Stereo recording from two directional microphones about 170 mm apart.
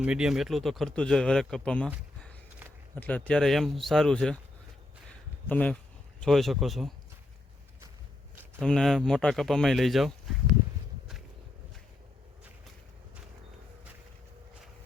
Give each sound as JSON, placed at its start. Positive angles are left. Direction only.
{"t": 0.0, "sound": "speech", "side_deg": -5}
{"t": 2.9, "sound": "speech", "side_deg": 10}
{"t": 5.5, "sound": "a man's voice", "side_deg": 10}
{"t": 8.6, "sound": "speech", "side_deg": 0}